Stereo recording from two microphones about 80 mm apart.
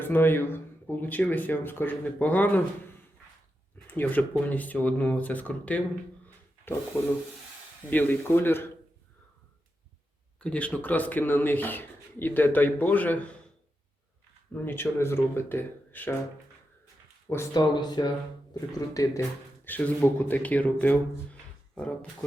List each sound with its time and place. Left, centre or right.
0.0 s speech: left
3.8 s speech: left
6.7 s speech: left
7.9 s speech: left
10.4 s speech: centre
14.5 s speech: left
17.2 s speech: left
17.5 s speech: left
18.5 s speech: left
19.6 s speech: left